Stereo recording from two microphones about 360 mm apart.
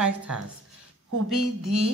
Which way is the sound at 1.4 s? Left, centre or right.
Right.